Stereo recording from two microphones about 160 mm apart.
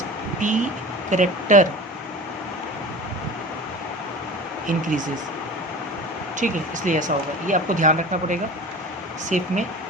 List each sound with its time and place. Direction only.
0.3 s speech: 50° right (ahead or behind)
4.6 s speech: 55° right (ahead or behind)
6.4 s speech: 55° right (ahead or behind)